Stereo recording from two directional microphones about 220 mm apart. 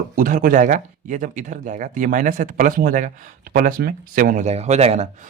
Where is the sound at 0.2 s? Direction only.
40° right (ahead or behind).